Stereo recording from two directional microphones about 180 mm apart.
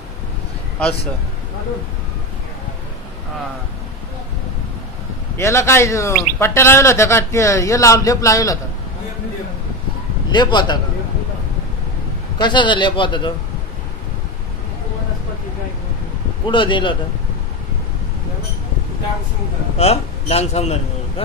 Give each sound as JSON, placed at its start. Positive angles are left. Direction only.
{"t": 5.4, "sound": "a man's voice", "side_deg": 15}
{"t": 10.3, "sound": "a man's voice", "side_deg": 25}
{"t": 12.4, "sound": "a man's voice", "side_deg": 25}
{"t": 16.4, "sound": "a man's voice", "side_deg": 25}
{"t": 19.8, "sound": "a man's voice", "side_deg": 35}